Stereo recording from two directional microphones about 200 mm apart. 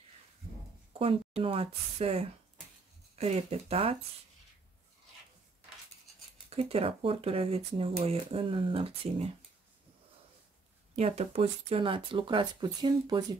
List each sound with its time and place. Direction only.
0.9 s speech: 30° right (ahead or behind)
6.5 s speech: 30° right (ahead or behind)
11.0 s speech: 30° right (ahead or behind)